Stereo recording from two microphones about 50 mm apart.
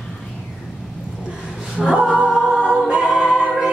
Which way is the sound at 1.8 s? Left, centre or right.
Centre.